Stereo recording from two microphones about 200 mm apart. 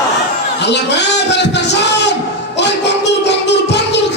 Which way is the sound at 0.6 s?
60° left (ahead or behind).